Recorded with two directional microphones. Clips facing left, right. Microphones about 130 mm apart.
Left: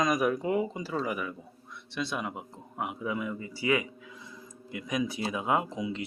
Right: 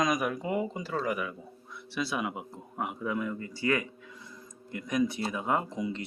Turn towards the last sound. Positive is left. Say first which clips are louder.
# left 1 dB
turn(degrees=5)  # may be behind; listen again after turning